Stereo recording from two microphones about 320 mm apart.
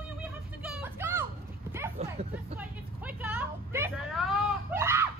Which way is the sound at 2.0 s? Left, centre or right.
Right.